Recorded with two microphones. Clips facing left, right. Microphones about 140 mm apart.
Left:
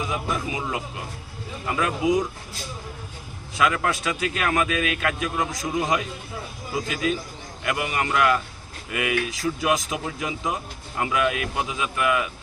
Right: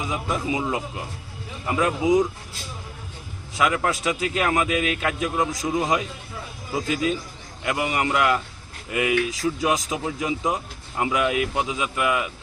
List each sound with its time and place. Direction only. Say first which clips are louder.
0.0 s speech: right 1 dB; 20° right (ahead or behind)
3.6 s speech: right 1 dB; 20° right (ahead or behind)
7.6 s speech: right 2 dB; 20° right (ahead or behind)